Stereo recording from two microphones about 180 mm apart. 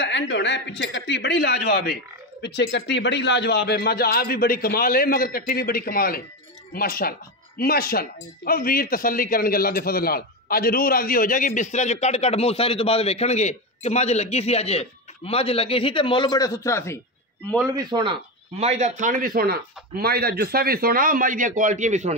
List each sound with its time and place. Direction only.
0.0 s speech: 80° left; by 17.0 s 15° left (ahead or behind)
17.7 s a man's voice: 25° right (ahead or behind); by 22.1 s 40° right (ahead or behind)